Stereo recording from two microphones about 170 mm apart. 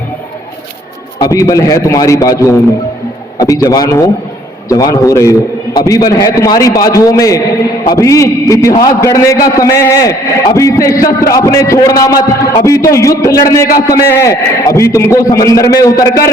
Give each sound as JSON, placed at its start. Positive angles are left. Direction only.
{"t": 1.2, "sound": "a man's voice", "side_deg": 20}